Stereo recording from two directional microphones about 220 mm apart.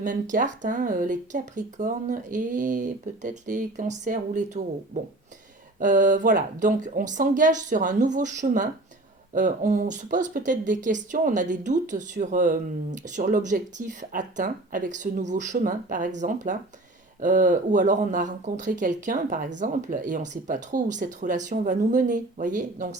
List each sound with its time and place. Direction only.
0.0 s speech: 35° right (ahead or behind)
5.8 s speech: 35° right (ahead or behind)